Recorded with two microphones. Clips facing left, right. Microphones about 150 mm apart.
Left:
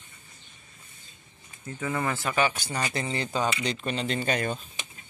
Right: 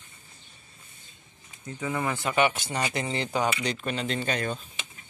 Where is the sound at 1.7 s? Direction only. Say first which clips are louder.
Even; 15° right (ahead or behind).